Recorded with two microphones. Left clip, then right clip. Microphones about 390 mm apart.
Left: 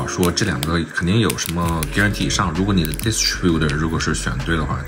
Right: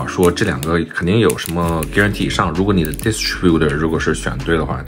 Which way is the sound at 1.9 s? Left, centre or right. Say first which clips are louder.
Right 3 dB; centre.